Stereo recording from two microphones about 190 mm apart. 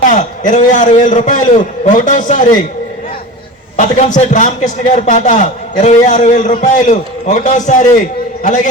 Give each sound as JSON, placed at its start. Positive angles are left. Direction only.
{"t": 0.1, "sound": "a man's voice", "side_deg": 40}
{"t": 3.8, "sound": "a man's voice", "side_deg": 40}